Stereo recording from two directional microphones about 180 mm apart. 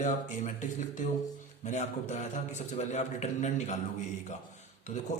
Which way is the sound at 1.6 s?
40° left (ahead or behind).